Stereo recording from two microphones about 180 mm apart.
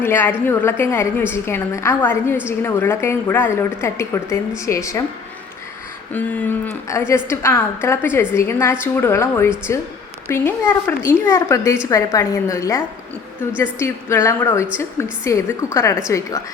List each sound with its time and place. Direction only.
0.0 s a woman's voice: 10° left (ahead or behind)
6.1 s a woman's voice: 10° left (ahead or behind)